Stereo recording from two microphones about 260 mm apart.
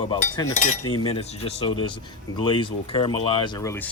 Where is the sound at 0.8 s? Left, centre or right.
Left.